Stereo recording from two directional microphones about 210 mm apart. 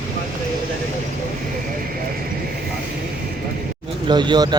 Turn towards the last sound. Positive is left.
turn(degrees=-20)  # may be behind; listen again after turning